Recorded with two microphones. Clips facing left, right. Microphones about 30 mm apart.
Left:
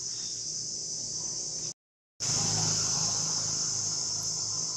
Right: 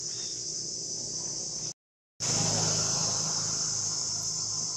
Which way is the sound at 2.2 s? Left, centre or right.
Centre.